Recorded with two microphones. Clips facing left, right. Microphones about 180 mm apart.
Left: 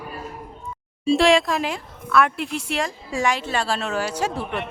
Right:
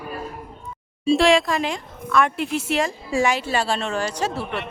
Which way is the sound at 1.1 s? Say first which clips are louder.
Even; centre (ahead or behind).